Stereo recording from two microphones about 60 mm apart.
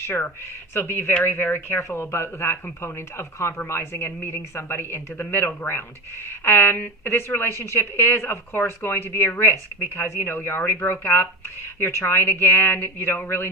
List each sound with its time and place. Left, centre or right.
0.7 s speech: left
1.8 s a woman's voice: left